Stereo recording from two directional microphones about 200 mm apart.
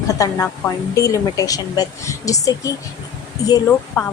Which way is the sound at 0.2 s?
10° left (ahead or behind).